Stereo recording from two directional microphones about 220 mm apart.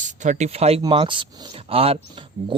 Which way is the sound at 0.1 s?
35° right (ahead or behind).